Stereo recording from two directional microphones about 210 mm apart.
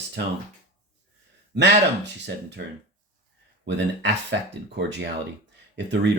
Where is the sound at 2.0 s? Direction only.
55° right (ahead or behind).